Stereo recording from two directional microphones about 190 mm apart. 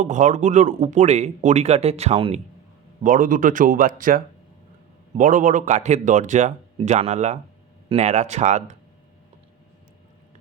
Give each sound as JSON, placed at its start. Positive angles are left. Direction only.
{"t": 0.0, "sound": "speech", "side_deg": -40}
{"t": 3.0, "sound": "speech", "side_deg": -45}